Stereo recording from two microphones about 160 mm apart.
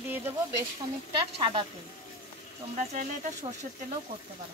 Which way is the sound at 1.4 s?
30° right (ahead or behind).